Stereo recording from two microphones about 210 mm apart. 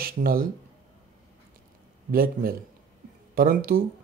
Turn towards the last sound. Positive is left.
turn(degrees=-45)  # may be behind; listen again after turning